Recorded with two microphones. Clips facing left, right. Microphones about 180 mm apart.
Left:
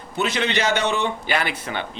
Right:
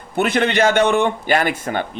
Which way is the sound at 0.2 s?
55° right (ahead or behind).